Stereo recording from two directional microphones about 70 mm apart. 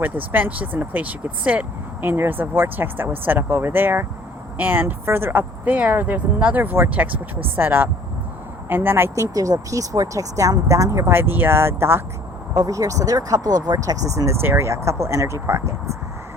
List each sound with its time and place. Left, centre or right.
0.0 s speech: right
9.1 s speech: right
12.5 s speech: right
14.4 s speech: right